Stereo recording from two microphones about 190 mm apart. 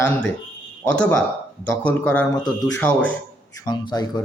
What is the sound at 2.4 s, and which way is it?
Speech, 20° left (ahead or behind).